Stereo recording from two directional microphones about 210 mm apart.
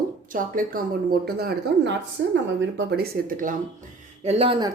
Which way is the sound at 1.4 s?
50° right (ahead or behind).